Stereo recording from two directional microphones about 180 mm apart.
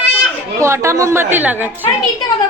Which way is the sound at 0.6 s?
15° right (ahead or behind).